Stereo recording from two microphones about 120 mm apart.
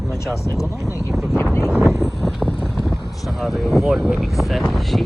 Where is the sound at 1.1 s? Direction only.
Centre (ahead or behind).